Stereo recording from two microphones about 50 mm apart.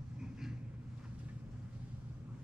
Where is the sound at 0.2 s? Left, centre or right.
Centre.